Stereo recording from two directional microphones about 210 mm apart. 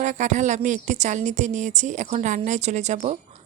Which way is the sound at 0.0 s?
35° right (ahead or behind).